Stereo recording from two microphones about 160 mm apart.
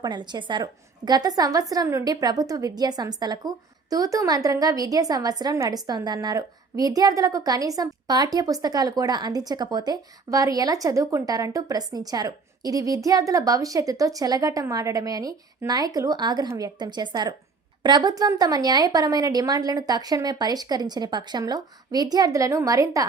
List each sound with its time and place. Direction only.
0.0 s a woman's voice: 25° right (ahead or behind)